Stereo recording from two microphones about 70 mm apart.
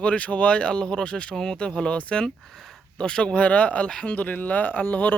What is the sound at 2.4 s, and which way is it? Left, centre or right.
Speech, centre.